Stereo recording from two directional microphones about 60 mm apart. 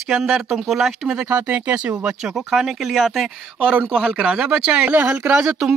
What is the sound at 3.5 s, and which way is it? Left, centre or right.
Speech, centre.